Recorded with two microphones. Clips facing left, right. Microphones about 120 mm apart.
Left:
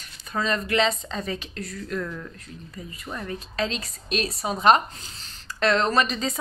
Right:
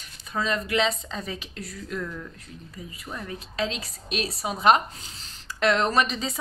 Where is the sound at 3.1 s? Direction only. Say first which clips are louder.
Left 3 dB; 5° right (ahead or behind).